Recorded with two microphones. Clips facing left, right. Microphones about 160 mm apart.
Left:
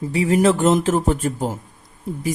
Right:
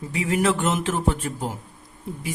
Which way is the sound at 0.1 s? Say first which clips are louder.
Left 6 dB; 35° left (ahead or behind).